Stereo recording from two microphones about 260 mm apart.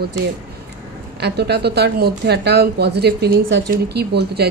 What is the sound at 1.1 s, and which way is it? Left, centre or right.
Speech, right.